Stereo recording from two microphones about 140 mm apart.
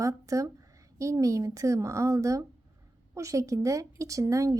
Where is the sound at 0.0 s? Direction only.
25° right (ahead or behind).